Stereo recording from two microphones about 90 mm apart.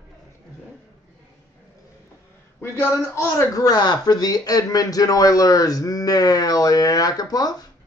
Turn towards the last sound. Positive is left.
turn(degrees=45)  # may be behind; listen again after turning